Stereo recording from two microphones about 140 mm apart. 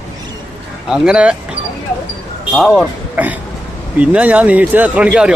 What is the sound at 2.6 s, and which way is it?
Speech, 5° left (ahead or behind).